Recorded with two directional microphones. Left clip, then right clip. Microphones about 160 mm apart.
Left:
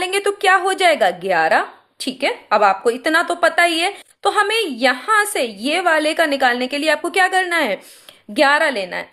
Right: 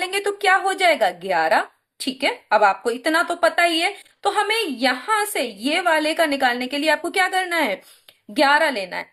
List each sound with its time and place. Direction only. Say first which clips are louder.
0.0 s a woman's voice: left 4 dB; 35° left (ahead or behind)